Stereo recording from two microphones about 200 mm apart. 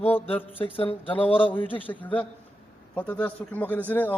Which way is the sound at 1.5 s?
10° left (ahead or behind).